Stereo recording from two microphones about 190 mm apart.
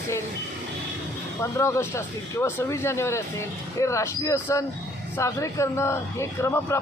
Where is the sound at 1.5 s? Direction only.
15° left (ahead or behind).